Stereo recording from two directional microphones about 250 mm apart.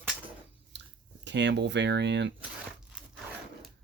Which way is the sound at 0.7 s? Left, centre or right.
Right.